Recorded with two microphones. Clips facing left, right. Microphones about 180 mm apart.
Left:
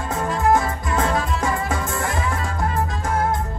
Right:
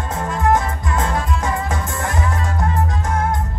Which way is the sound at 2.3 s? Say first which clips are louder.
Right 2 dB; 25° right (ahead or behind).